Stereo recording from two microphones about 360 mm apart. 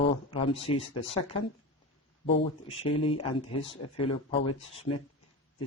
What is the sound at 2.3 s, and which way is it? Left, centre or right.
Speech, centre.